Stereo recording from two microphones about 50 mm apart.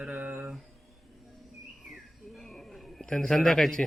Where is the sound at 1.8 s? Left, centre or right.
Centre.